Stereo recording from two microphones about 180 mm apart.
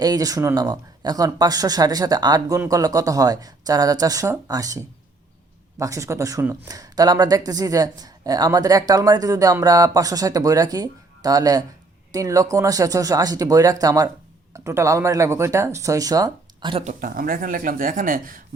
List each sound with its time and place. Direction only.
0.0 s speech: 20° right (ahead or behind)
5.8 s speech: 15° right (ahead or behind)
16.8 s speech: 50° right (ahead or behind)